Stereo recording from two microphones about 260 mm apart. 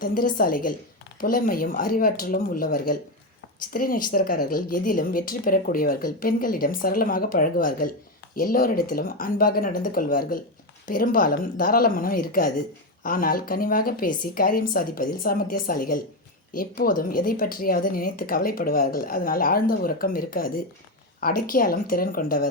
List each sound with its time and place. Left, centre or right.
0.0 s a woman's voice: left